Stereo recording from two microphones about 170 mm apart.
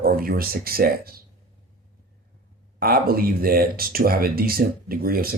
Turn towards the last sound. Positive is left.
turn(degrees=-60)  # may be behind; listen again after turning